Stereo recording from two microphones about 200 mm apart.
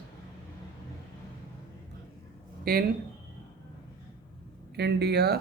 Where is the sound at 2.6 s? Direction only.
50° right (ahead or behind).